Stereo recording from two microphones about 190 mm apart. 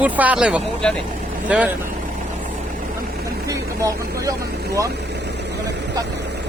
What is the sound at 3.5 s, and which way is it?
Vehicle, 15° right (ahead or behind).